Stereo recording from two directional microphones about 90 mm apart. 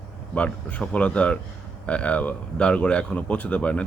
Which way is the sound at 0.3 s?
15° left (ahead or behind).